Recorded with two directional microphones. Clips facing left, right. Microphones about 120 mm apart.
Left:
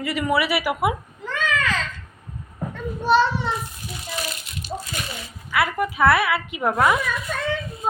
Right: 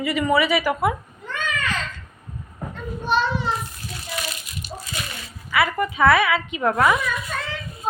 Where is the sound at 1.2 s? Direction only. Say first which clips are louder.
Left 4 dB; 90° left.